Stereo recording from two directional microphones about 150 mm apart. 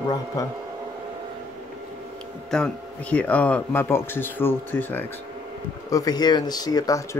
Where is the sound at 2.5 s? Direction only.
5° left (ahead or behind).